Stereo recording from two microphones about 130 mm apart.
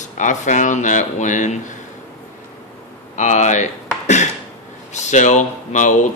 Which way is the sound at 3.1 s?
65° left (ahead or behind).